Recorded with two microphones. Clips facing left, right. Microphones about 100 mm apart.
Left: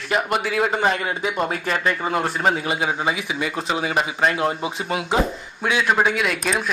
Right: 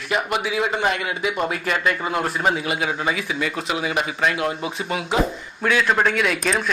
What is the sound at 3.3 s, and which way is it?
Speech, 10° left (ahead or behind).